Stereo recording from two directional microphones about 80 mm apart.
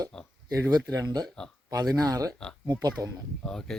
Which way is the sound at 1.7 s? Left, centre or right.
Right.